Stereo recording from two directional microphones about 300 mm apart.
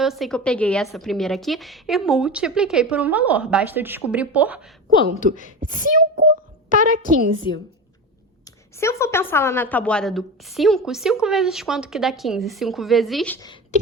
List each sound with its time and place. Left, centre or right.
0.0 s a woman's voice: centre
5.3 s speech: right
8.4 s a woman's voice: centre